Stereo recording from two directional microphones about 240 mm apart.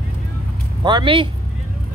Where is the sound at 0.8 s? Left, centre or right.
Centre.